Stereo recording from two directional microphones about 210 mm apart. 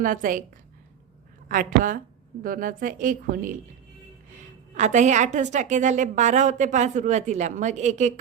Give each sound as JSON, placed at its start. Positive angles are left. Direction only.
{"t": 0.0, "sound": "a woman's voice", "side_deg": -40}
{"t": 1.5, "sound": "a woman's voice", "side_deg": -40}
{"t": 4.7, "sound": "a woman's voice", "side_deg": -35}